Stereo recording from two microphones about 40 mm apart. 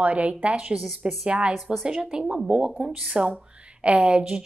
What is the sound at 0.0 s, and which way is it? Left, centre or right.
Speech, right.